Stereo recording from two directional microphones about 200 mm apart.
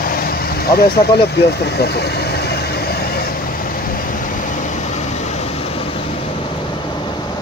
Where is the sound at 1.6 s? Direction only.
55° left (ahead or behind).